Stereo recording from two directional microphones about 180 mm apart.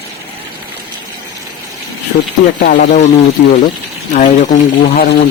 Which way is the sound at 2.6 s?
50° left (ahead or behind).